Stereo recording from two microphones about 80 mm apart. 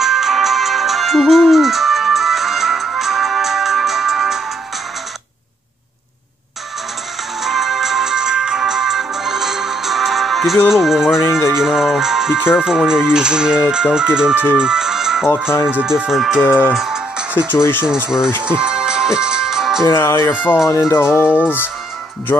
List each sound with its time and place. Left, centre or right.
0.0 s music: centre
7.4 s music: centre
10.7 s speech: centre
14.6 s music: centre
15.7 s speech: centre
16.4 s speech: left
16.7 s music: centre
17.5 s speech: left
18.0 s speech: centre
18.4 s music: centre
20.0 s speech: left